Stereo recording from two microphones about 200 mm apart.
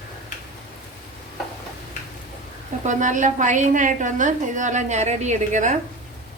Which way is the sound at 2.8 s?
40° right (ahead or behind).